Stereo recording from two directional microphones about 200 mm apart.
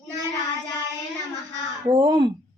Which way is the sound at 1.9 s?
25° right (ahead or behind).